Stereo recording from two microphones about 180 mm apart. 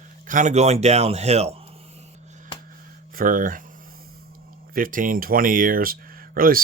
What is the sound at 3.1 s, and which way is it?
Speech, 50° right (ahead or behind).